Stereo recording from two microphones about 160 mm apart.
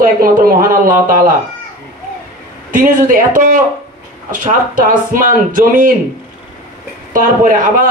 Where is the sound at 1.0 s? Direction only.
60° right (ahead or behind).